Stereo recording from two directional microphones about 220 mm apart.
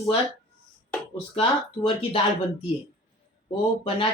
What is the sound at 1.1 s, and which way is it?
Speech, 25° left (ahead or behind).